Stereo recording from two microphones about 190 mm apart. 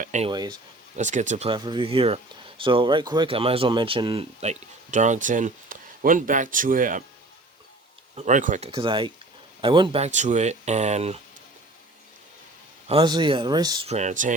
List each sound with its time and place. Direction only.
0.0 s speech: 40° right (ahead or behind)
0.3 s speech: 25° right (ahead or behind)
0.9 s speech: 40° right (ahead or behind)
1.5 s speech: 25° right (ahead or behind); by 7.0 s 45° right (ahead or behind)
8.1 s speech: 40° right (ahead or behind)
12.9 s speech: 25° right (ahead or behind)
13.8 s speech: 35° right (ahead or behind)